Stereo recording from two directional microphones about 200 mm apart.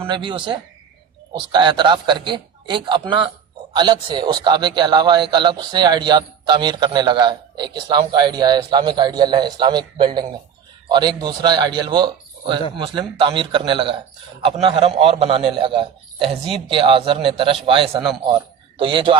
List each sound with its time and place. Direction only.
0.0 s a man's voice: 25° right (ahead or behind)